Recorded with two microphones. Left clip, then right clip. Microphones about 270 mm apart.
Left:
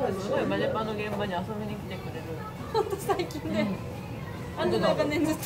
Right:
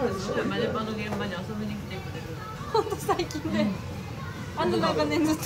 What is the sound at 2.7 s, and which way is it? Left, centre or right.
Speech, right.